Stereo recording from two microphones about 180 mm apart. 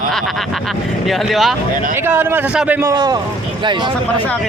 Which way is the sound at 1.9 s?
10° right (ahead or behind).